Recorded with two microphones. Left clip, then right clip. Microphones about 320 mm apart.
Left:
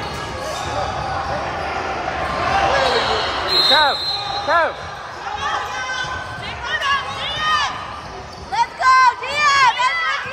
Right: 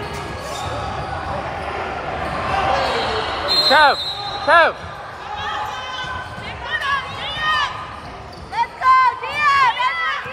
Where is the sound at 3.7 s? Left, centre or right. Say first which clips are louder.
Right 2 dB; right.